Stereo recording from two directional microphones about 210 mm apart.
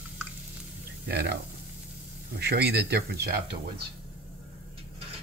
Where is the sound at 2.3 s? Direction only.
50° right (ahead or behind).